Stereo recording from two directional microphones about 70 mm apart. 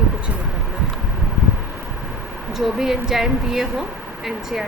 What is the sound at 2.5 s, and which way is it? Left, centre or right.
A woman's voice, centre.